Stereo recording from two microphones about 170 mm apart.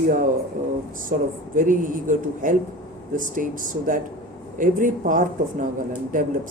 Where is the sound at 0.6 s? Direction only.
50° right (ahead or behind).